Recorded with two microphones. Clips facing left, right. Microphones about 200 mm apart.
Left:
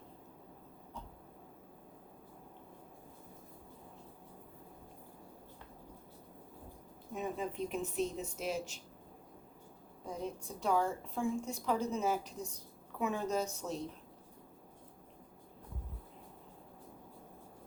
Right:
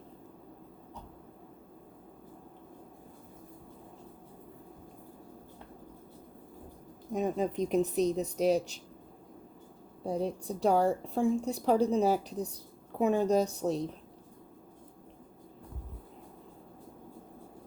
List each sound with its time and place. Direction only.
7.1 s a woman's voice: 40° right (ahead or behind)
10.0 s a woman's voice: 35° right (ahead or behind)